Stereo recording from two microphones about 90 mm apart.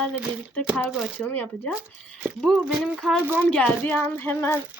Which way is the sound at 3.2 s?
25° right (ahead or behind).